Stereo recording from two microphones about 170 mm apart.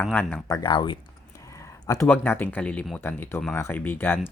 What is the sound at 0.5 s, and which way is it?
Speech, 25° left (ahead or behind).